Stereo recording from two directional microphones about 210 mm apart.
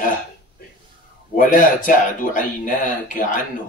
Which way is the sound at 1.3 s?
40° left (ahead or behind).